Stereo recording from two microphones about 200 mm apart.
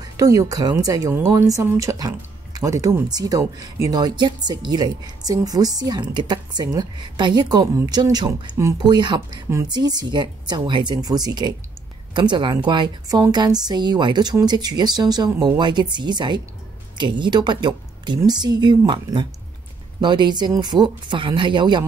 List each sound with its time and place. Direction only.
0.0 s speech: 15° right (ahead or behind)